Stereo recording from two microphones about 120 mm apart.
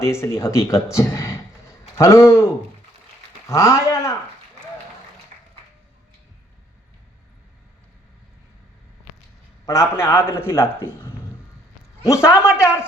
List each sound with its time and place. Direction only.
0.0 s speech: 25° left (ahead or behind)
9.9 s speech: 25° left (ahead or behind)
12.0 s speech: 25° left (ahead or behind)